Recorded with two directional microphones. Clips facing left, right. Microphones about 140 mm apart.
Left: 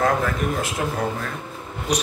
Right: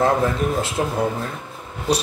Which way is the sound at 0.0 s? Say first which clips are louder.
Right 3 dB; 30° right (ahead or behind).